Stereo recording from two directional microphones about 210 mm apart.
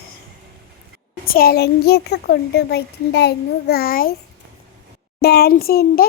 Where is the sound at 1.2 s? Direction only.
45° left (ahead or behind).